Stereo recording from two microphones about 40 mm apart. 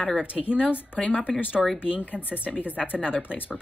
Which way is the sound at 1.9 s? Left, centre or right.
Left.